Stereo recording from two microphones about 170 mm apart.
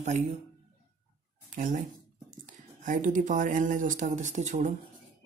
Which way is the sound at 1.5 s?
50° right (ahead or behind).